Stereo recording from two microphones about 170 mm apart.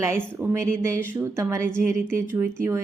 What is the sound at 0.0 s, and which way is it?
Speech, 15° right (ahead or behind).